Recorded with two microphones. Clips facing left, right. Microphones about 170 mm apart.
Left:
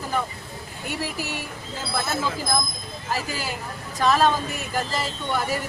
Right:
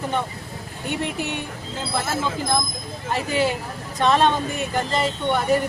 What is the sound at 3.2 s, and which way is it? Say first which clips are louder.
Speech: right 7 dB; 25° right (ahead or behind).